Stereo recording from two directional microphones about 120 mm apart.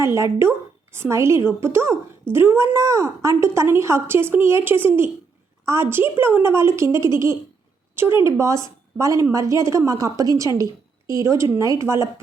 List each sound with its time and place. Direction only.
0.0 s a woman's voice: 25° right (ahead or behind)